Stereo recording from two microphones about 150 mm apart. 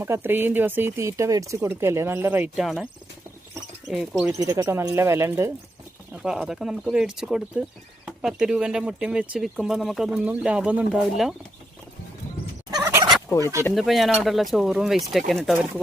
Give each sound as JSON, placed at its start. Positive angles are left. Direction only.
{"t": 0.0, "sound": "speech", "side_deg": -15}
{"t": 2.6, "sound": "speech", "side_deg": 0}
{"t": 4.3, "sound": "speech", "side_deg": -20}
{"t": 6.2, "sound": "speech", "side_deg": -5}
{"t": 12.8, "sound": "fowl", "side_deg": -20}
{"t": 13.7, "sound": "speech", "side_deg": 0}